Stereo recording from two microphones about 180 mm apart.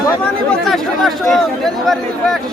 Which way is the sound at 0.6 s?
Centre (ahead or behind).